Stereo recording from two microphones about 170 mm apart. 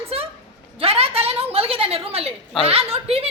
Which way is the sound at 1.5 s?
35° right (ahead or behind).